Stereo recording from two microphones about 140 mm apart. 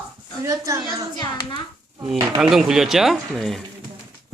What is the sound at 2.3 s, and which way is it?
Speech, 5° right (ahead or behind).